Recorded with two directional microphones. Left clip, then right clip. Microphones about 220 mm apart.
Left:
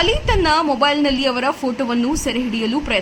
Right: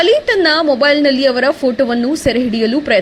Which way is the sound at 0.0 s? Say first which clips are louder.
Right 6 dB; 15° right (ahead or behind).